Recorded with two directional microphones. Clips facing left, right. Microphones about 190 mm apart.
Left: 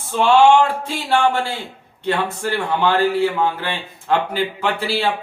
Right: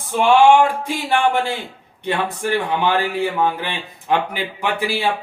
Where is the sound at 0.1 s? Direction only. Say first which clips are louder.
Even; 15° right (ahead or behind).